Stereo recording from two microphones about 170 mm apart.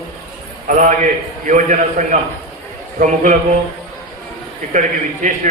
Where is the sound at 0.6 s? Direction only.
50° right (ahead or behind).